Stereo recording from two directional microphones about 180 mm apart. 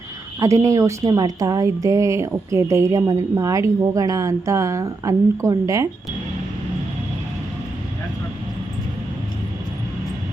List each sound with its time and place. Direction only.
0.3 s a woman's voice: 15° right (ahead or behind)